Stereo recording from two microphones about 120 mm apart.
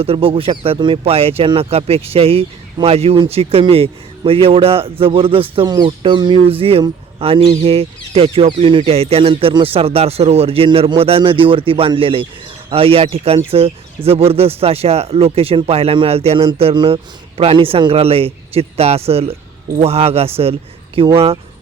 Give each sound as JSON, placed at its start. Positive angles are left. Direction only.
{"t": 0.0, "sound": "speech", "side_deg": -50}
{"t": 5.6, "sound": "speech", "side_deg": -35}
{"t": 6.0, "sound": "speech", "side_deg": -45}